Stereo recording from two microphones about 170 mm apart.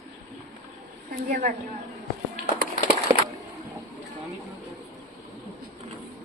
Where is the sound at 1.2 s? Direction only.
50° right (ahead or behind).